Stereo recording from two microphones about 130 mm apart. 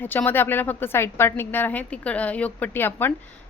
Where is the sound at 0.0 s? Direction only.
15° left (ahead or behind).